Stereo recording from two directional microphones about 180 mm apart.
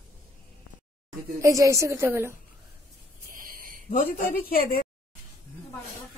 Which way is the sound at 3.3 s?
50° right (ahead or behind).